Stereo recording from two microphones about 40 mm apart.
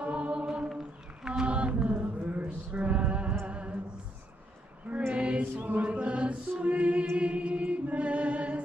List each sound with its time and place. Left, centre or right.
0.0 s choir: right
1.2 s mantra: centre
1.5 s mantra: right
2.4 s music: right
5.1 s choir: right
5.4 s chant: right
7.2 s music: right